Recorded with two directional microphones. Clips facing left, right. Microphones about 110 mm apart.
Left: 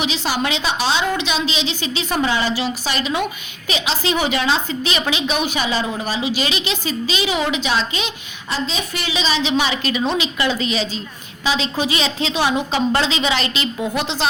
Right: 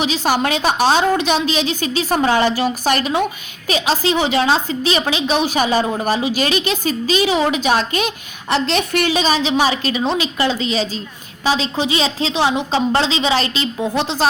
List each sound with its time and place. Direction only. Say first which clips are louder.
0.0 s a woman's voice: right 4 dB; 45° right (ahead or behind)
8.5 s a woman's voice: right 7 dB; 70° right (ahead or behind); by 14.3 s 35° right (ahead or behind)